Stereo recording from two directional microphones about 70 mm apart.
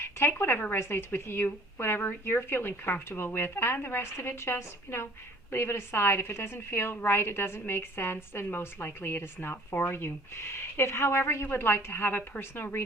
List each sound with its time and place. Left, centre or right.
0.0 s a woman's voice: left